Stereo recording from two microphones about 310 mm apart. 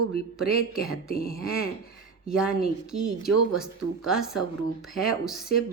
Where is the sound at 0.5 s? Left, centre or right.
Left.